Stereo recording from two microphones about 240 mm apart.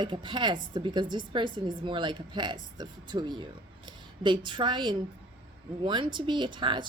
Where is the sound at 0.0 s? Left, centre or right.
Centre.